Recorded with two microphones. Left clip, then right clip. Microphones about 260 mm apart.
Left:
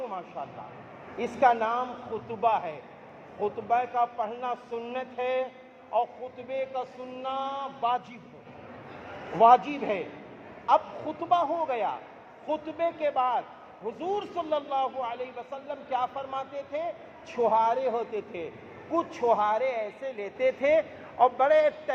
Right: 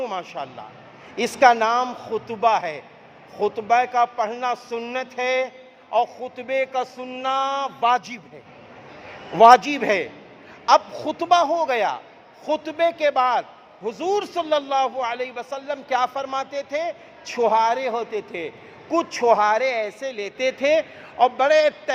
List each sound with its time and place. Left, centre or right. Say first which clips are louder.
0.0 s a sound: right 8 dB; right
1.1 s a man's voice: right 8 dB; right
9.4 s a man's voice: right 8 dB; right